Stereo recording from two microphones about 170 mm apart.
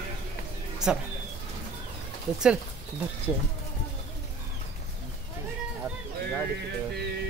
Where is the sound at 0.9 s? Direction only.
5° right (ahead or behind).